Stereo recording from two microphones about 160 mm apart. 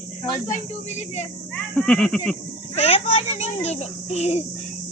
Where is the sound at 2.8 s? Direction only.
40° left (ahead or behind).